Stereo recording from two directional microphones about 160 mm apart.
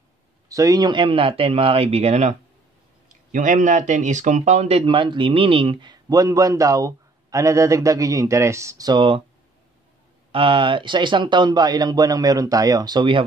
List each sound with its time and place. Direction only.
0.5 s speech: 20° right (ahead or behind)
10.3 s speech: 30° right (ahead or behind)